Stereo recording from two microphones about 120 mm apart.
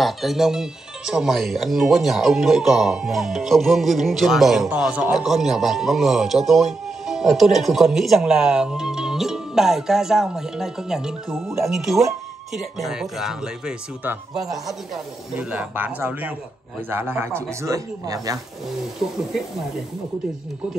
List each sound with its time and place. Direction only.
0.0 s speech: centre (ahead or behind); by 18.4 s 30° right (ahead or behind)